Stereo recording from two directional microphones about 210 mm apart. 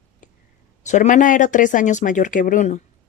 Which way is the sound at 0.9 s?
35° left (ahead or behind).